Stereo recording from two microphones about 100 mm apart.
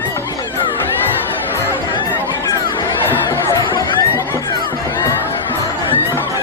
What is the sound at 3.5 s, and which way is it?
Neigh, 30° left (ahead or behind).